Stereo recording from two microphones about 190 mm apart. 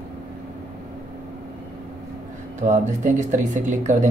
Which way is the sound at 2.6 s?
40° right (ahead or behind).